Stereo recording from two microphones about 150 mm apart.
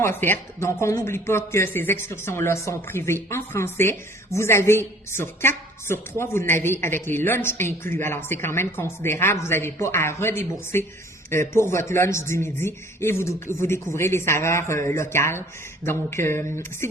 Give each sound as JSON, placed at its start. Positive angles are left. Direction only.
{"t": 0.0, "sound": "speech", "side_deg": 15}